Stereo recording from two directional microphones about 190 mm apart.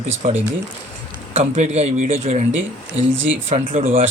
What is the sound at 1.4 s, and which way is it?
Speech, 35° right (ahead or behind).